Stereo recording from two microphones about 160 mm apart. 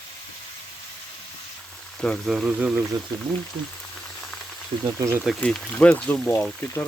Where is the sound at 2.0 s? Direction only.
Centre (ahead or behind).